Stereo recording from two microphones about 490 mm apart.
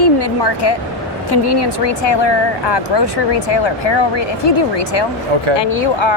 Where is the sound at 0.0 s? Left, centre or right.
Left.